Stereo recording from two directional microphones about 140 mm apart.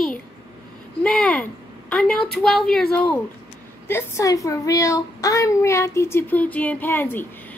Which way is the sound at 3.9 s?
20° left (ahead or behind).